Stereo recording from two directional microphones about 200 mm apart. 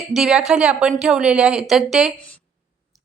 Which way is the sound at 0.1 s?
Centre (ahead or behind).